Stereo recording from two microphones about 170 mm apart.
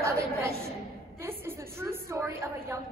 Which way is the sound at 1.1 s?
15° right (ahead or behind).